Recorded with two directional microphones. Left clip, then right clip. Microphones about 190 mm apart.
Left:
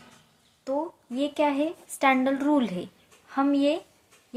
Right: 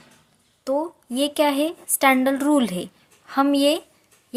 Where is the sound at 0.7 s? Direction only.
40° right (ahead or behind).